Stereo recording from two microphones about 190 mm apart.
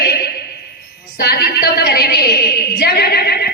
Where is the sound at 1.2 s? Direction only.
55° left (ahead or behind).